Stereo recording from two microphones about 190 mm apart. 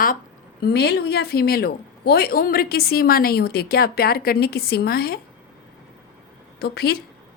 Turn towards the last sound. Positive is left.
turn(degrees=55)  # may be behind; listen again after turning